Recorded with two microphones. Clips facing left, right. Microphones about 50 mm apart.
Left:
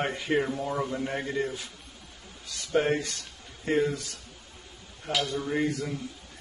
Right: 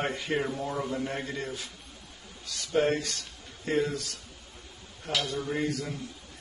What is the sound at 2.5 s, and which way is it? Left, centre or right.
Speech, centre.